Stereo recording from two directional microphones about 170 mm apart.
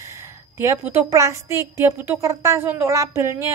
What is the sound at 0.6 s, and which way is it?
A woman's voice, 15° right (ahead or behind).